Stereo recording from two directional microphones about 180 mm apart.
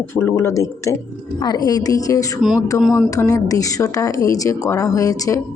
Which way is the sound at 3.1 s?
20° left (ahead or behind).